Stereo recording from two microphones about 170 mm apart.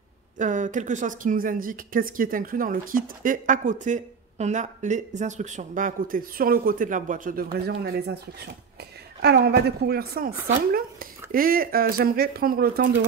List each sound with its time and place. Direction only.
0.4 s speech: 45° right (ahead or behind); by 13.0 s 65° right (ahead or behind)